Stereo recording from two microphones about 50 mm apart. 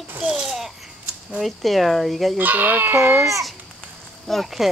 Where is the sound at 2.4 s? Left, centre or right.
Right.